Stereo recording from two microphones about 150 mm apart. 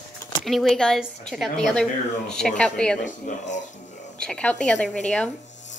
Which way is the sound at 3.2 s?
55° left (ahead or behind).